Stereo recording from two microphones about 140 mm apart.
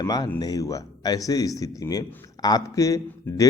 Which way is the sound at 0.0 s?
25° left (ahead or behind).